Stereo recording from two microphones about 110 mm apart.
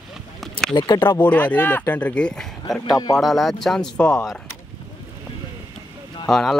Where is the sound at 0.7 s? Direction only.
50° left (ahead or behind).